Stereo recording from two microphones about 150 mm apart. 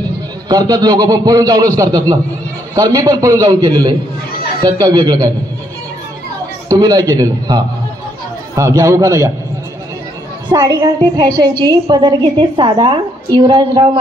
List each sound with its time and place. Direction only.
0.5 s a woman's voice: 25° right (ahead or behind)
6.7 s a woman's voice: 25° right (ahead or behind)
10.5 s a woman's voice: 25° right (ahead or behind)